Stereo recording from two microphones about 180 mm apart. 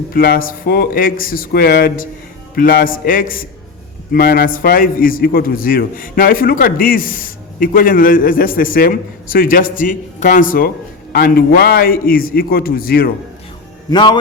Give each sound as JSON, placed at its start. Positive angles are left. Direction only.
{"t": 0.1, "sound": "a man's voice", "side_deg": 55}
{"t": 13.9, "sound": "a man's voice", "side_deg": 25}